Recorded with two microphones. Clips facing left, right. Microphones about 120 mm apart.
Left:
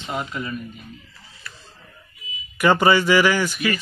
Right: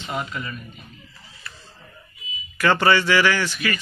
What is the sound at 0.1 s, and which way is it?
Speech, 10° left (ahead or behind).